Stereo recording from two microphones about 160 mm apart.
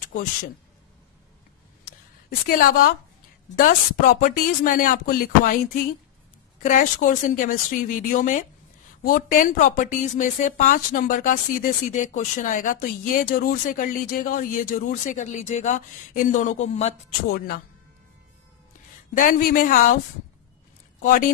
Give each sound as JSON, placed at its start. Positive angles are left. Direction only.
{"t": 0.0, "sound": "speech", "side_deg": 55}
{"t": 1.9, "sound": "a sound", "side_deg": 70}
{"t": 3.5, "sound": "speech", "side_deg": 60}
{"t": 6.6, "sound": "speech", "side_deg": 55}
{"t": 19.1, "sound": "speech", "side_deg": 55}